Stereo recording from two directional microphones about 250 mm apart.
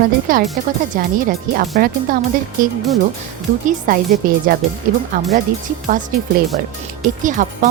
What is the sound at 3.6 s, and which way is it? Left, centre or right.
Speech, right.